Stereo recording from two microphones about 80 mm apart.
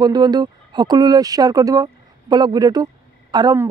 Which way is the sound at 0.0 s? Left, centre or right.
Right.